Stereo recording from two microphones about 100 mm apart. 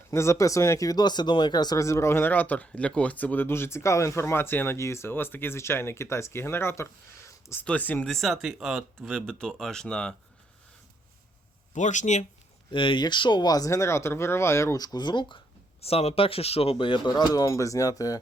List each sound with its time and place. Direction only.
0.1 s speech: 30° left (ahead or behind)
1.8 s speech: 30° left (ahead or behind)
7.3 s a sound: 30° left (ahead or behind)
7.6 s speech: 15° left (ahead or behind)
8.1 s speech: centre (ahead or behind)
12.7 s speech: 55° left (ahead or behind); by 14.8 s 30° left (ahead or behind)
14.8 s speech: 45° left (ahead or behind)
15.8 s speech: 90° left; by 18.2 s 35° left (ahead or behind)